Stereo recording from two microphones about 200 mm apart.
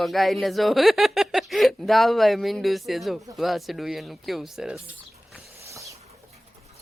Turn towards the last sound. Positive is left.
turn(degrees=-15)  # may be behind; listen again after turning